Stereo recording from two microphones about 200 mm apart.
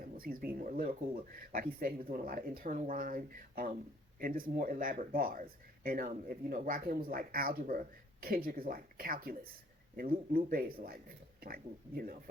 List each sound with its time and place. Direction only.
0.2 s speech: 45° right (ahead or behind)